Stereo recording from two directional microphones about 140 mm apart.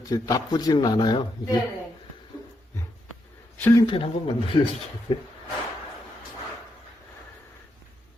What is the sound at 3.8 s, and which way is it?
Speech, 35° left (ahead or behind).